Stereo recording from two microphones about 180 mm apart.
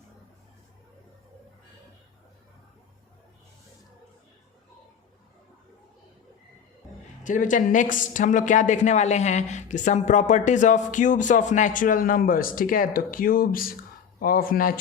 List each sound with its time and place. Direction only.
7.3 s a woman's voice: 45° left (ahead or behind)